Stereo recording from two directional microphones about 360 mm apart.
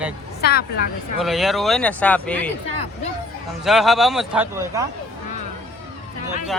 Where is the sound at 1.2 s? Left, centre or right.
Centre.